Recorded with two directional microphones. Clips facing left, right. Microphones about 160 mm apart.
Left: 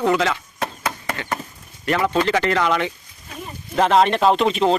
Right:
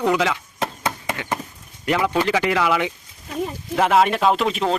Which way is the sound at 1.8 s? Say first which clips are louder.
Left 1 dB; 15° right (ahead or behind).